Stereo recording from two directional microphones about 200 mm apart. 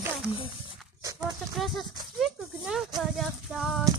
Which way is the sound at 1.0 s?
15° right (ahead or behind).